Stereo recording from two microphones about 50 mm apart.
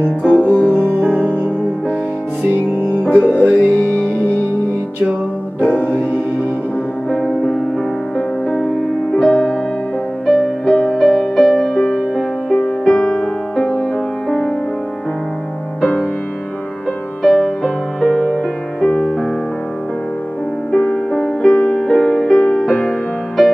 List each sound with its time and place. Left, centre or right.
0.2 s music: centre
0.5 s music: left
3.0 s music: centre
3.5 s music: left
5.6 s music: left
7.1 s music: centre
9.3 s music: centre
17.2 s music: centre
20.7 s music: centre